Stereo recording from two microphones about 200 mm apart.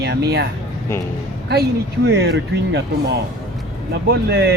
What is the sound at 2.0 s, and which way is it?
Speech, 55° right (ahead or behind).